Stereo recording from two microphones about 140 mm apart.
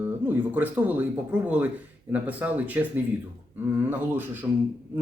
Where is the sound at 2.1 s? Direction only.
10° right (ahead or behind).